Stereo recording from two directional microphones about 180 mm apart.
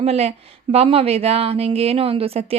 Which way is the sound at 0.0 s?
35° right (ahead or behind).